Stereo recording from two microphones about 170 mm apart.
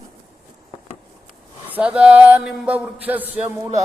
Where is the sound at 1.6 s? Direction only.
10° right (ahead or behind).